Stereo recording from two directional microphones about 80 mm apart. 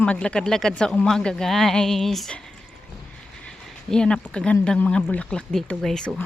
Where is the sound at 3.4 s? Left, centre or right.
Centre.